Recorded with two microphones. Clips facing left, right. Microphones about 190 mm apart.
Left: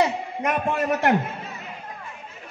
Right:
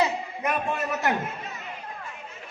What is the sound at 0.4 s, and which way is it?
Speech, 55° left (ahead or behind).